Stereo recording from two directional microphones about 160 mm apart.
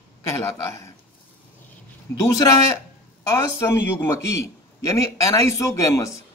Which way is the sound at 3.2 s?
15° left (ahead or behind).